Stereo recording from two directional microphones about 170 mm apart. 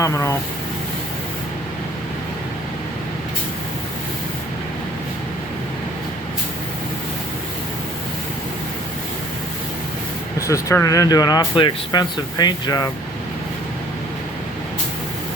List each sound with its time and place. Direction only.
0.0 s speech: 15° left (ahead or behind)
10.4 s speech: 15° left (ahead or behind)